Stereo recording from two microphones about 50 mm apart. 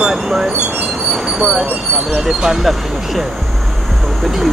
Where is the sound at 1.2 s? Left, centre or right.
Centre.